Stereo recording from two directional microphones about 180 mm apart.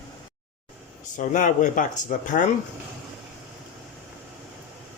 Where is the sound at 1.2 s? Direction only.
45° left (ahead or behind).